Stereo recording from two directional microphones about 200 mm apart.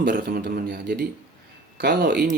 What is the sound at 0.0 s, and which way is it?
Speech, 55° right (ahead or behind).